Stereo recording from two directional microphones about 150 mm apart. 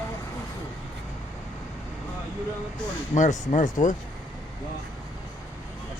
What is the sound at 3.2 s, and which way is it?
Speech, 55° left (ahead or behind).